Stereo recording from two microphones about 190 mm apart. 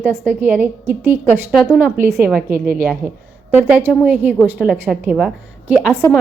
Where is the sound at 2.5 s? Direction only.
45° right (ahead or behind).